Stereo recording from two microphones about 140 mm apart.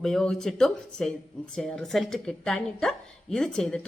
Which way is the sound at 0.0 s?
5° left (ahead or behind).